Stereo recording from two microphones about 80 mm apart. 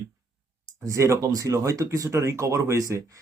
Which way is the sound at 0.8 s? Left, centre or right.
Right.